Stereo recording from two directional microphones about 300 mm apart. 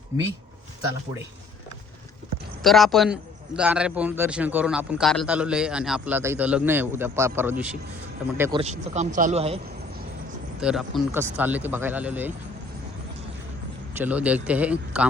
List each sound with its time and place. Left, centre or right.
2.6 s a man's voice: centre
8.4 s speech: centre
10.6 s a man's voice: centre
14.0 s a man's voice: centre